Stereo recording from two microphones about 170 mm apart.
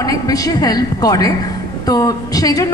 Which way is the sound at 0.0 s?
20° left (ahead or behind).